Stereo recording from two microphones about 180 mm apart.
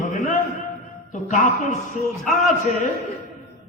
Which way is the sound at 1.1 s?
40° left (ahead or behind).